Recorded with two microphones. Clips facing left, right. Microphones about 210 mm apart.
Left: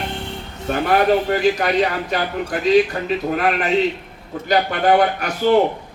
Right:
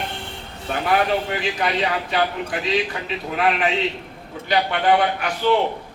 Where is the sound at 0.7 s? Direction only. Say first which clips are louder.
Left 4 dB; 45° left (ahead or behind).